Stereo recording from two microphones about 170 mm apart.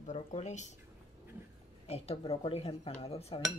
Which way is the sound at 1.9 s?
35° left (ahead or behind).